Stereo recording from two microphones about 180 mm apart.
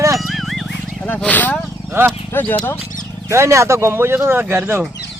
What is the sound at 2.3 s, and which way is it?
Speech, 10° left (ahead or behind).